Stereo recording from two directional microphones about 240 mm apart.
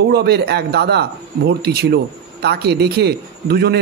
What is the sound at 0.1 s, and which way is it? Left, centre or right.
A man's voice, right.